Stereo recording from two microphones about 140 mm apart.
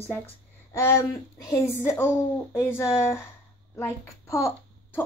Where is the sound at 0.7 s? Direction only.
25° left (ahead or behind).